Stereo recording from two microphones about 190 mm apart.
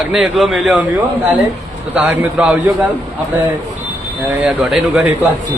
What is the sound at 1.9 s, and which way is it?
Speech, 5° right (ahead or behind).